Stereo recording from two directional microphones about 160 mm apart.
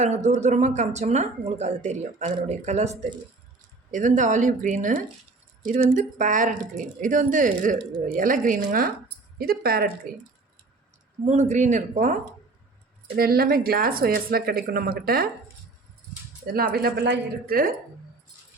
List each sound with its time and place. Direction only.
0.0 s speech: 45° right (ahead or behind)
9.4 s speech: 70° right (ahead or behind)
11.3 s speech: 45° right (ahead or behind)
13.1 s speech: 70° right (ahead or behind)
16.5 s speech: 70° right (ahead or behind)